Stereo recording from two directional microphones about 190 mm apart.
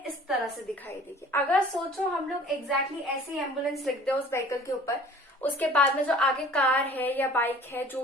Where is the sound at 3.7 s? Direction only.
5° left (ahead or behind).